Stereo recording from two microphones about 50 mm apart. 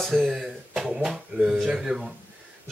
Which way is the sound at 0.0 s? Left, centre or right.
Centre.